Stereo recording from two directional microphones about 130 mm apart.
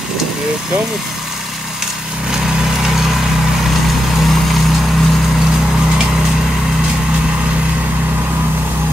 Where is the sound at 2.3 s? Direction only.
5° right (ahead or behind).